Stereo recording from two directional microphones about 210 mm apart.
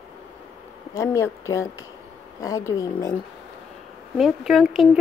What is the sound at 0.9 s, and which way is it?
Speech, 15° left (ahead or behind).